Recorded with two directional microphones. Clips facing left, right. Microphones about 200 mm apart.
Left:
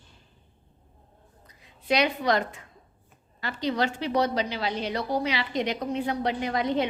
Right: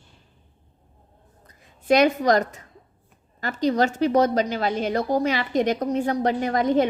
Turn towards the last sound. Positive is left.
turn(degrees=-45)  # may be behind; listen again after turning